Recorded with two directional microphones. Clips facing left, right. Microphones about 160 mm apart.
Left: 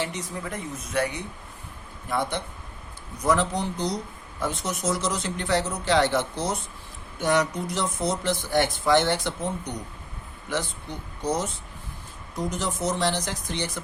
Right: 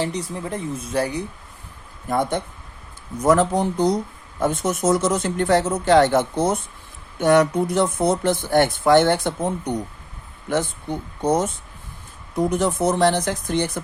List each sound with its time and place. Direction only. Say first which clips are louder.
0.0 s speech: right 5 dB; 35° right (ahead or behind)
2.0 s speech: right 6 dB; 45° right (ahead or behind)